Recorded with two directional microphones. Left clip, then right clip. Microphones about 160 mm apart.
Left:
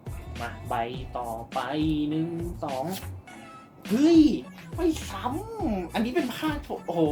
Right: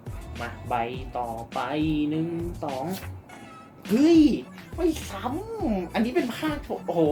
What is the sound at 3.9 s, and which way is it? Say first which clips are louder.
Speech: right 1 dB; 15° left (ahead or behind).